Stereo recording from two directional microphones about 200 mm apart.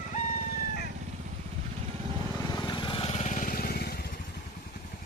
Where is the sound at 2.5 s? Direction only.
20° left (ahead or behind); by 4.1 s 50° left (ahead or behind).